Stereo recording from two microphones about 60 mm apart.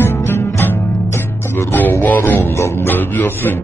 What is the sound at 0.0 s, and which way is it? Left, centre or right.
Music, left.